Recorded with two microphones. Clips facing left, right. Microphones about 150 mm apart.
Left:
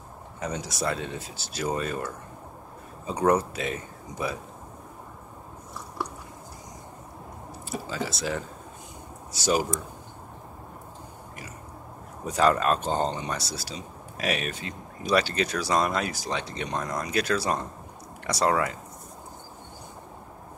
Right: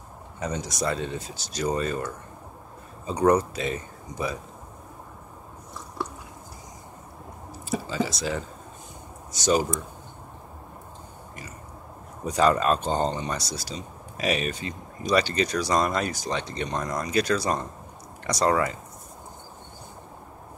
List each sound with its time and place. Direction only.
0.4 s speech: 5° left (ahead or behind)
7.7 s speech: centre (ahead or behind)
12.3 s speech: centre (ahead or behind)